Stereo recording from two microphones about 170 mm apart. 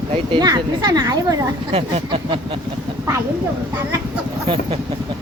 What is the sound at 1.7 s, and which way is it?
Speech, 35° right (ahead or behind).